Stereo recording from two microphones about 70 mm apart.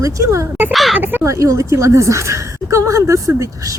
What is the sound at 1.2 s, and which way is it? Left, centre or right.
A woman's voice, right.